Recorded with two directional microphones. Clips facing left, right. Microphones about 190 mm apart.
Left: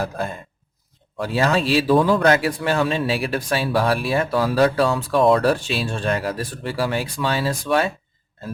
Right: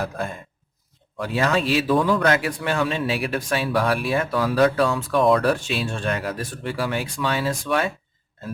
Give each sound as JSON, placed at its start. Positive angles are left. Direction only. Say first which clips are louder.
{"t": 0.0, "sound": "a man's voice", "louder": "left 2 dB", "side_deg": 30}